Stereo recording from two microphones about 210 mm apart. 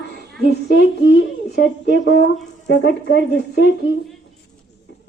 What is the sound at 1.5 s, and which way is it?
Speech, 50° left (ahead or behind).